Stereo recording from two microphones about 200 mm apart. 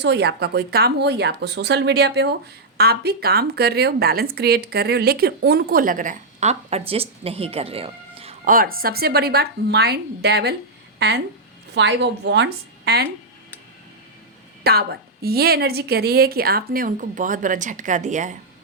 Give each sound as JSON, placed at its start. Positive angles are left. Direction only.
{"t": 0.0, "sound": "a woman's voice", "side_deg": -55}
{"t": 8.4, "sound": "speech", "side_deg": -45}
{"t": 11.7, "sound": "a woman's voice", "side_deg": -60}
{"t": 14.6, "sound": "speech", "side_deg": -50}